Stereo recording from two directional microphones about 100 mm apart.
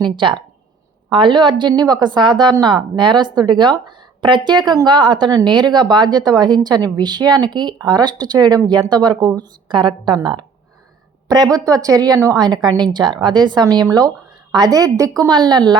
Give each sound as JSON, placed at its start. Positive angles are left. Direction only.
{"t": 0.2, "sound": "a woman's voice", "side_deg": -55}
{"t": 11.5, "sound": "a woman's voice", "side_deg": -35}
{"t": 15.3, "sound": "a woman's voice", "side_deg": -45}